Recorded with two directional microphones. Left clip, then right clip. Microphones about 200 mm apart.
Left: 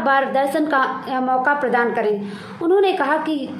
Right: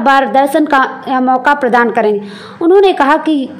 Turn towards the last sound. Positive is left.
turn(degrees=-40)  # may be behind; listen again after turning